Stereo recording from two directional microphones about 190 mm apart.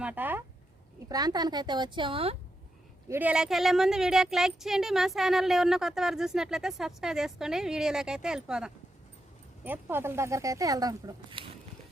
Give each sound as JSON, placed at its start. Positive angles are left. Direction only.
{"t": 0.0, "sound": "speech", "side_deg": -10}
{"t": 1.0, "sound": "speech", "side_deg": -20}
{"t": 3.1, "sound": "speech", "side_deg": -10}